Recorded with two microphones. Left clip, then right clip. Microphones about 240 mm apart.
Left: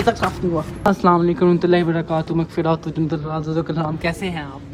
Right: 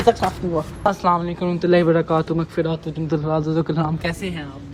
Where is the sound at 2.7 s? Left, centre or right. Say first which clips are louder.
Left 5 dB; left.